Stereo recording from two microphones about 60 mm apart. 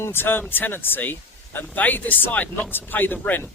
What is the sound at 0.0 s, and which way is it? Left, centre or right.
A man's voice, left.